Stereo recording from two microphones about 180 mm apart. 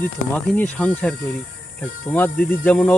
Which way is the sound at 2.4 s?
55° left (ahead or behind).